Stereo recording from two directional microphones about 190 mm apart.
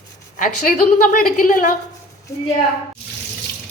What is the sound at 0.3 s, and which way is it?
A woman's voice, 45° left (ahead or behind).